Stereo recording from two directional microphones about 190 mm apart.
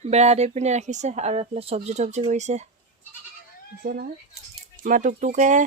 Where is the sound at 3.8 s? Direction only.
55° right (ahead or behind).